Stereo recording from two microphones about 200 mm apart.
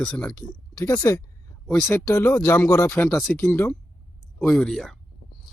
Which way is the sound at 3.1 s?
5° left (ahead or behind).